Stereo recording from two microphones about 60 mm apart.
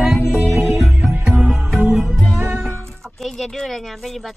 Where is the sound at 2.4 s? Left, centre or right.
Right.